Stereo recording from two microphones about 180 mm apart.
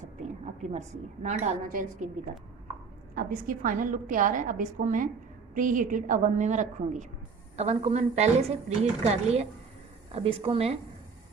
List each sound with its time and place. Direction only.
0.7 s a woman's voice: 40° right (ahead or behind)
3.2 s a woman's voice: 50° right (ahead or behind); by 10.8 s 30° right (ahead or behind)